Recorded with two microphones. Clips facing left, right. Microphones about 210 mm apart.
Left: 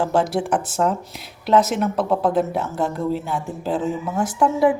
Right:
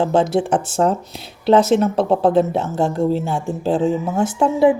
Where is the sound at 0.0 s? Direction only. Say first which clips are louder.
Right 4 dB; 20° right (ahead or behind).